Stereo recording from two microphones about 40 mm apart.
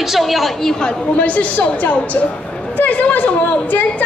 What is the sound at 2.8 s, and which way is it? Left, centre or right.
Chatter, left.